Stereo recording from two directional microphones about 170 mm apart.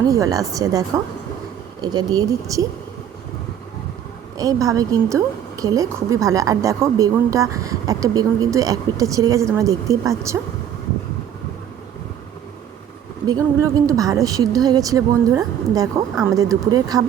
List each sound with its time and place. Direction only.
0.0 s a woman's voice: 20° right (ahead or behind)
4.4 s a woman's voice: 20° right (ahead or behind)
13.2 s a woman's voice: 20° right (ahead or behind)